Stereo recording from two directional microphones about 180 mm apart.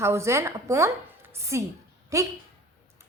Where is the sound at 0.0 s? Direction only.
15° right (ahead or behind).